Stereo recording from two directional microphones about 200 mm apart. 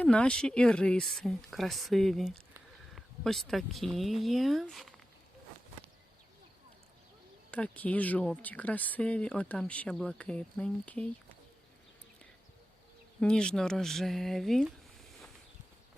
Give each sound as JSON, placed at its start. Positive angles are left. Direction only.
{"t": 0.0, "sound": "speech", "side_deg": 5}
{"t": 7.5, "sound": "speech", "side_deg": 5}
{"t": 13.1, "sound": "speech", "side_deg": 5}